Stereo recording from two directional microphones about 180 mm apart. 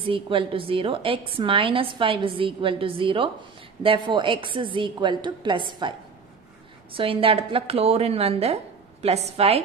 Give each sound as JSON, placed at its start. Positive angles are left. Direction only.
{"t": 0.1, "sound": "a woman's voice", "side_deg": -30}